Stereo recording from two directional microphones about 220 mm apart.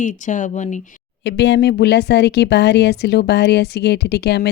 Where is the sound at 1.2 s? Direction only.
50° left (ahead or behind).